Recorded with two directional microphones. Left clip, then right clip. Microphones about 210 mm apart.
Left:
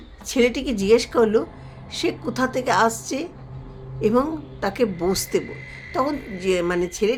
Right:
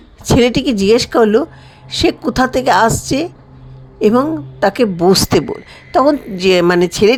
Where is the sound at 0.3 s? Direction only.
35° right (ahead or behind).